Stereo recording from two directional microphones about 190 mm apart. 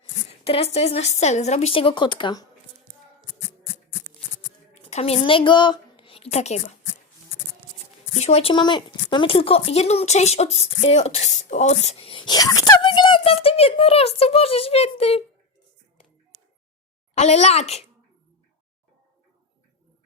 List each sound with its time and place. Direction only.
0.0 s speech: 30° left (ahead or behind)
4.7 s a woman's voice: 35° left (ahead or behind)
8.1 s speech: 35° left (ahead or behind)
17.2 s speech: 35° left (ahead or behind)